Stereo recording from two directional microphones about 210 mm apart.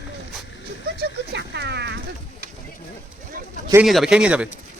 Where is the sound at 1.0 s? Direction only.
55° right (ahead or behind).